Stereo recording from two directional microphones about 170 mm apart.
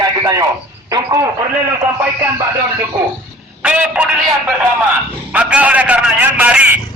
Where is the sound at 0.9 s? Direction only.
20° right (ahead or behind).